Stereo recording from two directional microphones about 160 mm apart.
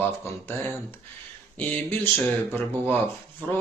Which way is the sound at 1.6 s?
10° left (ahead or behind).